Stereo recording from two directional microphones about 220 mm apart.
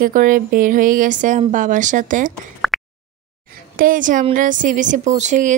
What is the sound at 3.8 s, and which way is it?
A woman's voice, 35° right (ahead or behind).